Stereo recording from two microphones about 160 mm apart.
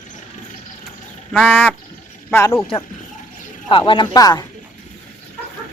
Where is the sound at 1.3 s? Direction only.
5° left (ahead or behind).